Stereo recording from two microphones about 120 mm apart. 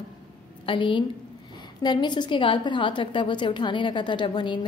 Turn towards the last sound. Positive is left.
turn(degrees=40)  # may be behind; listen again after turning